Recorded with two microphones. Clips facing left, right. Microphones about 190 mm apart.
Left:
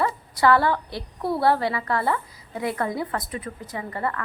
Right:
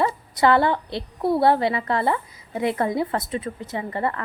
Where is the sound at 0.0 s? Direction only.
20° right (ahead or behind).